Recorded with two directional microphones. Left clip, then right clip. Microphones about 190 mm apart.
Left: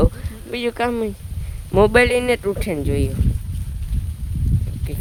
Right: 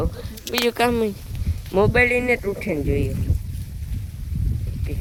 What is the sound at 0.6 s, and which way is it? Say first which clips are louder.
Speech: right 2 dB; 10° right (ahead or behind).